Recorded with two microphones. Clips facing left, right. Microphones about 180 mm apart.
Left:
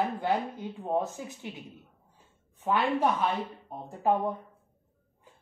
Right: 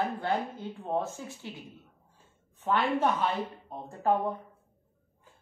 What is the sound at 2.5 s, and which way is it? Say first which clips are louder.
A woman's voice: left 1 dB; 10° left (ahead or behind).